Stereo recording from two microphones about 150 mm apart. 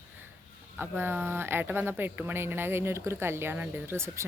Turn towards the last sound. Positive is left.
turn(degrees=-20)  # may be behind; listen again after turning